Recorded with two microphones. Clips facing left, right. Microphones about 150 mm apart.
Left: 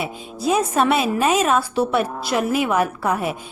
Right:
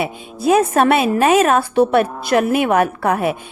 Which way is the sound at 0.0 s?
60° right (ahead or behind).